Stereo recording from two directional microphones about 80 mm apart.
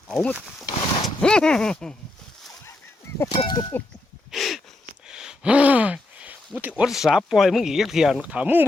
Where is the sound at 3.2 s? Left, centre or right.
Left.